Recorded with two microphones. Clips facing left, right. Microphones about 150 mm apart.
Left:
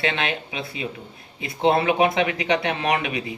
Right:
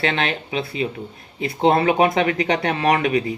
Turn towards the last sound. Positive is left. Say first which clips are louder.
# right 6 dB
turn(degrees=-45)  # may be behind; listen again after turning